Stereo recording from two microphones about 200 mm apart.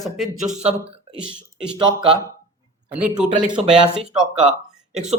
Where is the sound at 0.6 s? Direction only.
30° right (ahead or behind).